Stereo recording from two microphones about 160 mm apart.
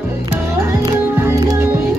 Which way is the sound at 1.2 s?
15° right (ahead or behind).